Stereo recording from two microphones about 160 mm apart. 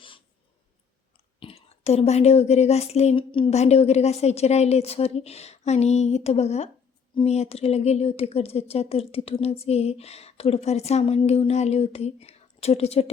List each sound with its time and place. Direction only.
1.4 s speech: 35° left (ahead or behind)